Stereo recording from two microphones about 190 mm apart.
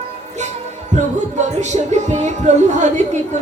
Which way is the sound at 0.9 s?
35° right (ahead or behind).